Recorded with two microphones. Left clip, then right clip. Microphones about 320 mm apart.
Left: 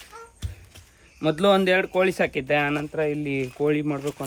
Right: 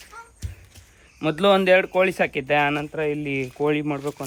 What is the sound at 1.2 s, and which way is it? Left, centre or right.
Speech, centre.